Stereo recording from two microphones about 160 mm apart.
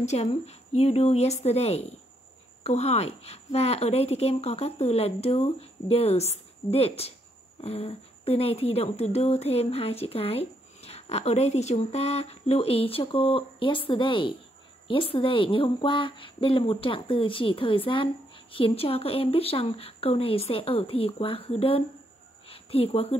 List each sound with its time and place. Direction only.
0.0 s a woman's voice: 40° left (ahead or behind)